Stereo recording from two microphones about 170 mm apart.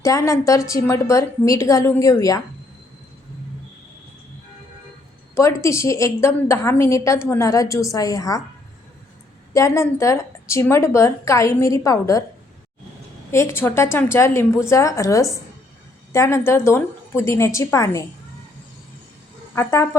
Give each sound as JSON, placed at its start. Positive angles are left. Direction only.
{"t": 0.0, "sound": "a woman's voice", "side_deg": 15}
{"t": 5.3, "sound": "a woman's voice", "side_deg": 15}
{"t": 9.5, "sound": "a woman's voice", "side_deg": 15}
{"t": 13.3, "sound": "a woman's voice", "side_deg": 15}
{"t": 19.5, "sound": "a woman's voice", "side_deg": 15}